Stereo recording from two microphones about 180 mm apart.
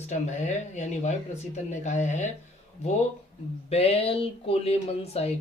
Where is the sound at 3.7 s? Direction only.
35° left (ahead or behind).